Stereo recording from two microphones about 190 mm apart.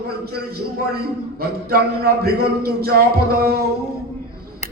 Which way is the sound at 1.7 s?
55° right (ahead or behind).